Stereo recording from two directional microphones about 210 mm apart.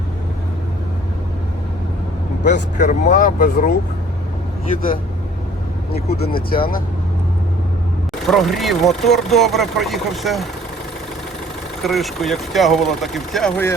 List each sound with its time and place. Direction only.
2.7 s speech: 35° left (ahead or behind)
5.9 s speech: 50° left (ahead or behind)
8.3 s speech: centre (ahead or behind)
11.8 s speech: centre (ahead or behind)